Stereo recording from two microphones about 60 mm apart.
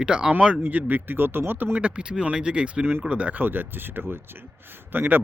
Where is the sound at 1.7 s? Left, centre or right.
Centre.